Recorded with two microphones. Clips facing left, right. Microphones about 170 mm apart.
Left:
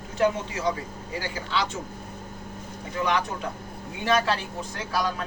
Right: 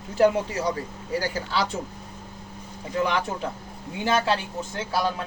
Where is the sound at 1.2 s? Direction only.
40° right (ahead or behind).